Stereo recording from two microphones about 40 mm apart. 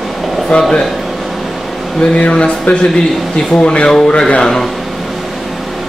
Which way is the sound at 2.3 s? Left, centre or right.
Left.